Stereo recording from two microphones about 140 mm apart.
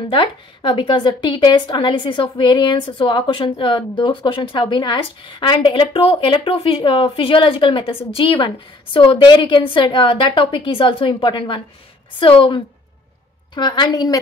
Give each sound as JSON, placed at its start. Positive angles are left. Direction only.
{"t": 0.1, "sound": "a woman's voice", "side_deg": 35}